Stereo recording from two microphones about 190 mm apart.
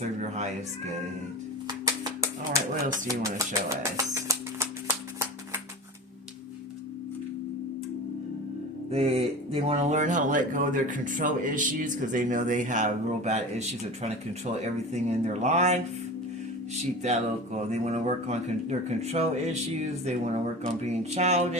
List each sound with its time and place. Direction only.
0.0 s speech: 40° right (ahead or behind)
1.6 s a sound: 20° right (ahead or behind)
8.9 s speech: 35° right (ahead or behind)
17.0 s speech: 35° right (ahead or behind)